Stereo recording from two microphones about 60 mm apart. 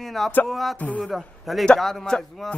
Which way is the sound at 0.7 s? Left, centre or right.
Left.